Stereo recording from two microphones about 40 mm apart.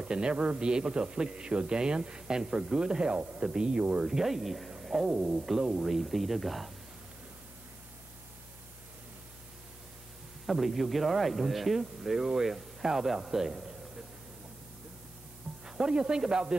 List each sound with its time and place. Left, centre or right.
0.0 s a man's voice: right
3.2 s a man's voice: right
4.0 s speech: centre
4.8 s a sound: centre
5.1 s a man's voice: right
5.4 s speech: centre
10.4 s speech: centre
15.6 s a man's voice: centre